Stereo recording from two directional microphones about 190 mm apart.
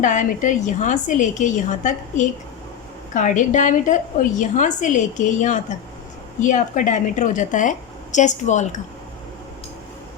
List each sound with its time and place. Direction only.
0.0 s a woman's voice: 40° left (ahead or behind)